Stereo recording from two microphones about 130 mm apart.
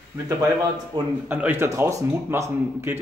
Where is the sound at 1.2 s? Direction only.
15° right (ahead or behind).